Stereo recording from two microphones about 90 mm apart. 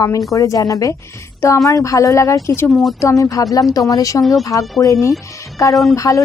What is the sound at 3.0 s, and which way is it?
A woman's voice, 35° left (ahead or behind).